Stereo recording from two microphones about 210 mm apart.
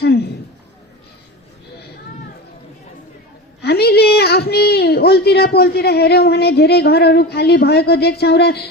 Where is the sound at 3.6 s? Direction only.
50° left (ahead or behind).